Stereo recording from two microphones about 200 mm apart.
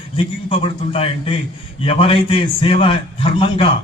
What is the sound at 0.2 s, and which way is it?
A man's voice, 25° left (ahead or behind).